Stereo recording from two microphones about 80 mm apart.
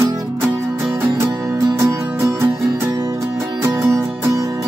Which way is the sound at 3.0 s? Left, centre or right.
Right.